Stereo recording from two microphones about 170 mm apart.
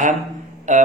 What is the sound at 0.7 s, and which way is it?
Music, 45° right (ahead or behind).